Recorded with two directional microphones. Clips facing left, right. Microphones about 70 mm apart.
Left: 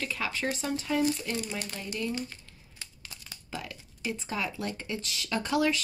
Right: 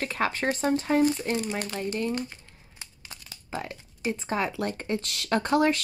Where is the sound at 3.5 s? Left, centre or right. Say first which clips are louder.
Right 5 dB; right.